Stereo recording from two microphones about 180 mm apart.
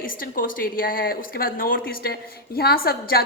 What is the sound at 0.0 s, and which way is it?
A woman's voice, 50° left (ahead or behind).